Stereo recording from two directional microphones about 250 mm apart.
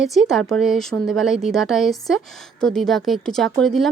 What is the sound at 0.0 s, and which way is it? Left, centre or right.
A woman's voice, centre.